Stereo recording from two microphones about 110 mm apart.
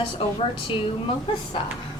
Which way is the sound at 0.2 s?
55° left (ahead or behind).